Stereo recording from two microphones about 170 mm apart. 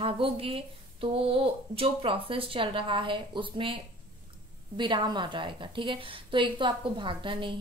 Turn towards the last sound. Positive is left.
turn(degrees=-30)  # may be behind; listen again after turning